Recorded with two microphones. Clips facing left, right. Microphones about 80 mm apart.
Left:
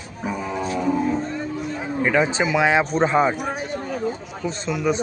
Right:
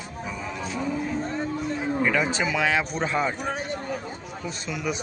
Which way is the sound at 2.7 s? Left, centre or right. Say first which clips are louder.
Left 7 dB; left.